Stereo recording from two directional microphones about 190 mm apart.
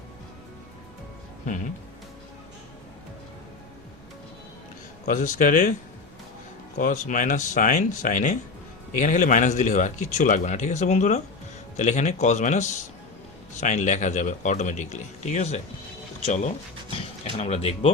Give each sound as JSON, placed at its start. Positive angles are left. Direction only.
{"t": 5.0, "sound": "speech", "side_deg": 40}
{"t": 6.7, "sound": "speech", "side_deg": 45}